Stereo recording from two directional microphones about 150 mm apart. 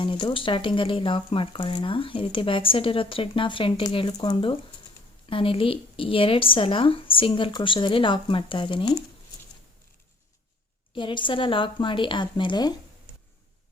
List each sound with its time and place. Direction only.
0.0 s speech: 30° left (ahead or behind)
10.9 s speech: 30° left (ahead or behind)